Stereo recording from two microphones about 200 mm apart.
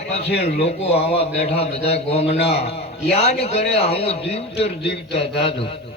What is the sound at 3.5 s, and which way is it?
Speech, 30° left (ahead or behind).